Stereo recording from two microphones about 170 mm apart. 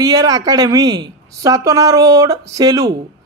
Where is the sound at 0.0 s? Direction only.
20° right (ahead or behind).